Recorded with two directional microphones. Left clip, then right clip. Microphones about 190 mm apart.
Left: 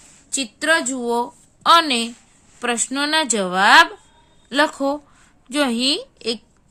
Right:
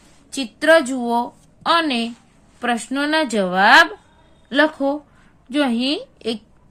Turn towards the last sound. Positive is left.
turn(degrees=15)  # may be behind; listen again after turning